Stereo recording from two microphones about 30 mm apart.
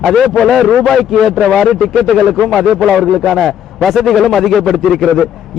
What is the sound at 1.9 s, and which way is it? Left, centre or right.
A man's voice, centre.